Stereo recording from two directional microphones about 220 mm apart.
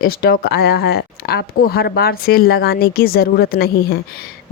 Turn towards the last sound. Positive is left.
turn(degrees=45)  # may be behind; listen again after turning